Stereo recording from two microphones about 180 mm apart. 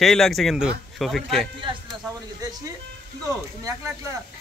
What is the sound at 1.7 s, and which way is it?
Speech, 25° right (ahead or behind).